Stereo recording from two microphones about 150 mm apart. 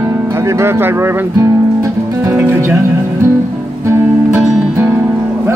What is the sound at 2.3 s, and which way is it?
Music, 15° right (ahead or behind).